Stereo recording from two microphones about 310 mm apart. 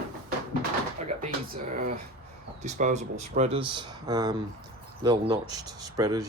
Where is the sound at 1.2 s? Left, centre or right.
Right.